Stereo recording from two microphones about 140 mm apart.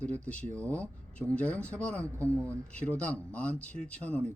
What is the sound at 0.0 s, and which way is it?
Speech, 10° left (ahead or behind).